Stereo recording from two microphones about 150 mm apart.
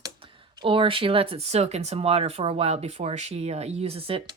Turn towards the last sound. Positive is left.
turn(degrees=-40)  # may be behind; listen again after turning